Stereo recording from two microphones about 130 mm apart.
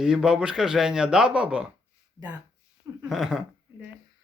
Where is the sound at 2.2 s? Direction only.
30° right (ahead or behind).